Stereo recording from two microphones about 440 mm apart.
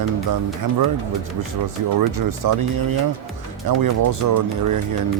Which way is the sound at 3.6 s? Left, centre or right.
Right.